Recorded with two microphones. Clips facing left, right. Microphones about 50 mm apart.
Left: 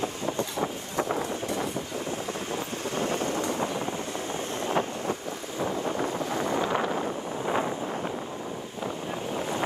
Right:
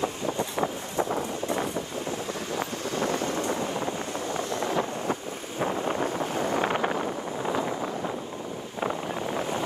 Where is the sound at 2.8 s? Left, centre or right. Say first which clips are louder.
Even; left.